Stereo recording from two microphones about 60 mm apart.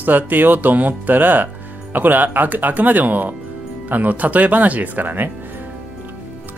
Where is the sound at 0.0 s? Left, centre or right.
Right.